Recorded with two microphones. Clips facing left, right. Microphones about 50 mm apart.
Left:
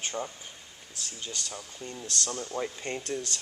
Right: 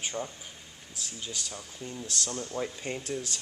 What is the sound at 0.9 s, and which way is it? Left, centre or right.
Speech, centre.